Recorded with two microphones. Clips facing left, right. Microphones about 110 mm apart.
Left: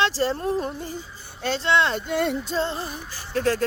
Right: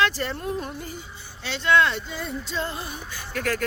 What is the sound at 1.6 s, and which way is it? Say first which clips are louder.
Music: right 2 dB; 25° left (ahead or behind).